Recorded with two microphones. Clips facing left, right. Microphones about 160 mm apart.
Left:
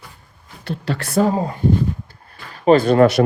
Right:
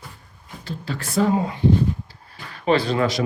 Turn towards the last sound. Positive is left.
turn(degrees=60)  # may be behind; listen again after turning